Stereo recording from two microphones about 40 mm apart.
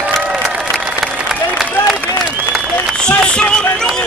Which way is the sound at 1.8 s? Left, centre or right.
Centre.